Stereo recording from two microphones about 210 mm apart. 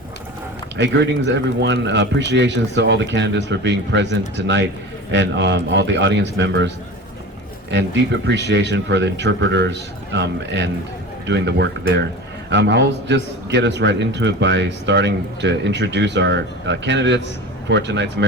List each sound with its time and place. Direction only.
0.8 s a man's voice: 55° right (ahead or behind)
7.7 s a man's voice: 55° right (ahead or behind)